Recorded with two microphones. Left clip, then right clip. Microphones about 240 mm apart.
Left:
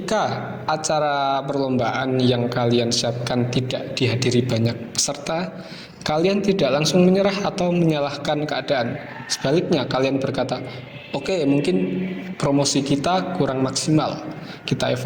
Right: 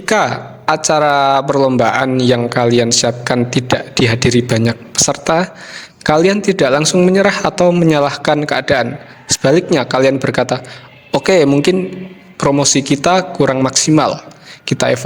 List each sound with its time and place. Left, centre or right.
0.0 s a man's voice: right